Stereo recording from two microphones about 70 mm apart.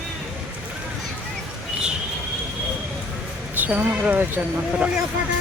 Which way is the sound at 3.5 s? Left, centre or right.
Right.